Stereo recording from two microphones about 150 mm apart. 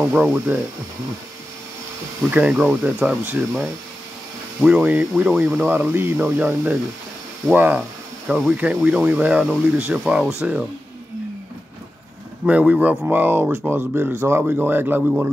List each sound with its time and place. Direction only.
0.0 s speech: 10° right (ahead or behind)
2.3 s speech: 5° right (ahead or behind)
4.6 s speech: 10° right (ahead or behind)
12.4 s speech: 10° right (ahead or behind)